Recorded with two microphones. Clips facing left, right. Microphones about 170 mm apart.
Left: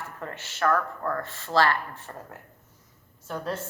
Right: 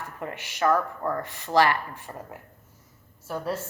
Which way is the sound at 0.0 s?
15° right (ahead or behind).